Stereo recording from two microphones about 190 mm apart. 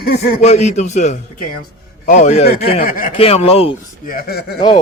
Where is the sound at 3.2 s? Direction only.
30° left (ahead or behind).